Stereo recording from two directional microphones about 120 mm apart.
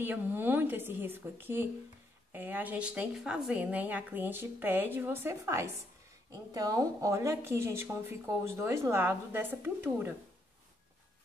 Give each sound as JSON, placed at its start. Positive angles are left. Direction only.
{"t": 0.0, "sound": "a woman's voice", "side_deg": -20}